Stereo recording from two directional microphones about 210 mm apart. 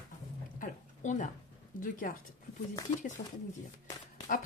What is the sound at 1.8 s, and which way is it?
Speech, 40° left (ahead or behind).